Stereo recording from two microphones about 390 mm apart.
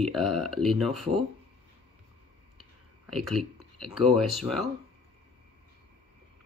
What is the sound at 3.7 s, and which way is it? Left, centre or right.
Speech, centre.